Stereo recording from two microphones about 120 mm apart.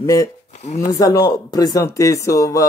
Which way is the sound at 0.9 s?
30° left (ahead or behind).